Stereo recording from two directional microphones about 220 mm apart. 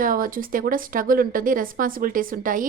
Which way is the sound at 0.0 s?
40° right (ahead or behind).